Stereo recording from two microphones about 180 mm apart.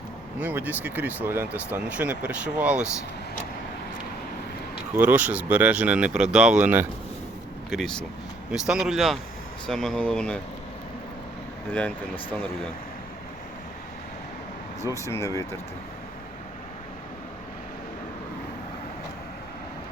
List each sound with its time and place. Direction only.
0.3 s speech: 10° right (ahead or behind)
4.9 s speech: 10° right (ahead or behind); by 10.4 s 5° left (ahead or behind)
11.7 s speech: 10° left (ahead or behind)
14.8 s speech: 15° left (ahead or behind)